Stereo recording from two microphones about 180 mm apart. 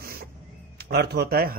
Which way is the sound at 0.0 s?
55° right (ahead or behind).